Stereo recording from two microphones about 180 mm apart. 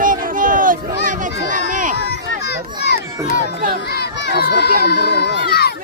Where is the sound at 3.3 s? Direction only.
60° right (ahead or behind).